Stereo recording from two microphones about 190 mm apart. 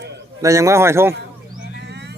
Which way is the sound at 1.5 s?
65° right (ahead or behind).